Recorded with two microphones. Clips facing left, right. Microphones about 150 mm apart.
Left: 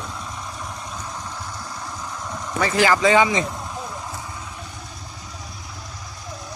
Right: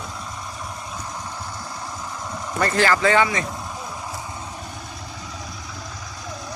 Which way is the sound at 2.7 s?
15° left (ahead or behind).